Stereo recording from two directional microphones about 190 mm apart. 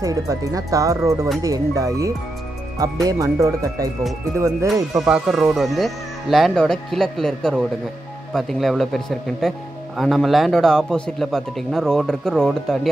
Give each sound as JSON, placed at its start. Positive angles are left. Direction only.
{"t": 0.0, "sound": "speech", "side_deg": -15}
{"t": 5.0, "sound": "a man's voice", "side_deg": -5}